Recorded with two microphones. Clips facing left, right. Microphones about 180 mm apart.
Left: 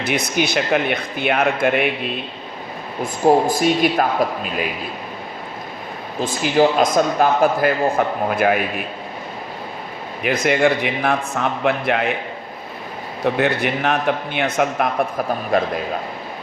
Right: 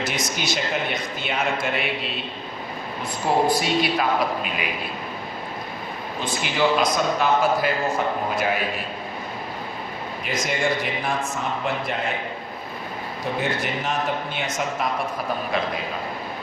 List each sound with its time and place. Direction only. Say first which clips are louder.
0.0 s a man's voice: left 6 dB; 60° left (ahead or behind)
3.0 s a man's voice: left 7 dB; 45° left (ahead or behind)
6.4 s a man's voice: left 6 dB; 45° left (ahead or behind)
10.2 s a man's voice: left 8 dB; 60° left (ahead or behind)
13.4 s a man's voice: left 6 dB; 65° left (ahead or behind)
15.5 s a man's voice: left 8 dB; 50° left (ahead or behind)